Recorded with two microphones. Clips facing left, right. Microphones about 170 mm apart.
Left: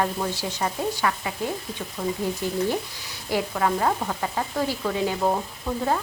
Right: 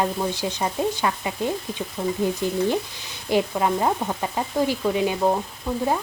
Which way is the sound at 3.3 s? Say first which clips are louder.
Right 3 dB; 20° right (ahead or behind).